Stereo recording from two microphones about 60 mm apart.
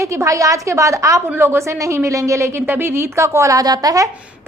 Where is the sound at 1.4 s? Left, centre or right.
Right.